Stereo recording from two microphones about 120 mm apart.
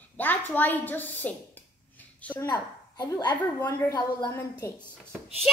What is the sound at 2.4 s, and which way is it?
A woman's voice, 35° left (ahead or behind).